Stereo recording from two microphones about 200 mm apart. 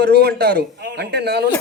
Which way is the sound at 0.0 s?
55° right (ahead or behind).